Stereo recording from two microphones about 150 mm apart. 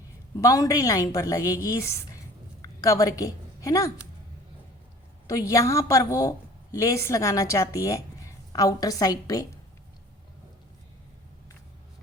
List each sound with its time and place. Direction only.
0.4 s a woman's voice: 20° left (ahead or behind)
5.5 s a woman's voice: 20° left (ahead or behind)